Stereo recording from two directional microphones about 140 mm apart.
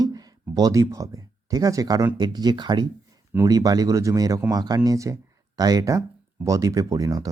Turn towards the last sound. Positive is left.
turn(degrees=-25)  # may be behind; listen again after turning